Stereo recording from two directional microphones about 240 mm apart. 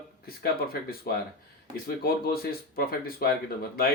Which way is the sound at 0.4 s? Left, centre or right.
Left.